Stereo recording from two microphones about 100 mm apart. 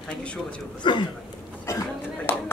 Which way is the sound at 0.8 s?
55° left (ahead or behind).